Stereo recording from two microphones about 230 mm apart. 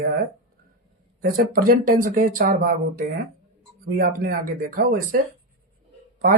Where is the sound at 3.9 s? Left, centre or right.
Right.